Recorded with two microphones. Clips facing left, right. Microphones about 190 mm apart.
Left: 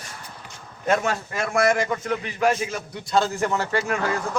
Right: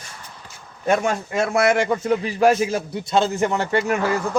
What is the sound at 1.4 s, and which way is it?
Speech, 5° right (ahead or behind).